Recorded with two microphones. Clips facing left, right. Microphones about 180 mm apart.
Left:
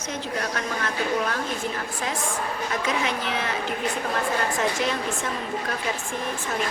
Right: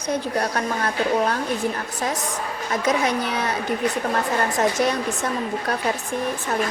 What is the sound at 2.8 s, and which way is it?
A man's voice, 40° right (ahead or behind).